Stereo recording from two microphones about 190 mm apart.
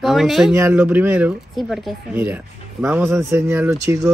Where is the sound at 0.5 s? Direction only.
10° right (ahead or behind).